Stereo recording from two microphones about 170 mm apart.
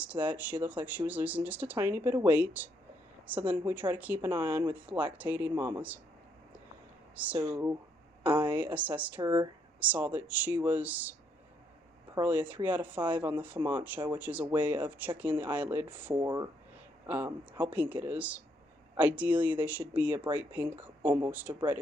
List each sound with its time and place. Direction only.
0.0 s speech: 10° right (ahead or behind)
7.2 s speech: 10° right (ahead or behind)
8.5 s speech: 10° right (ahead or behind)
9.2 s speech: 25° right (ahead or behind)
9.8 s speech: 10° right (ahead or behind)
12.2 s speech: 10° right (ahead or behind)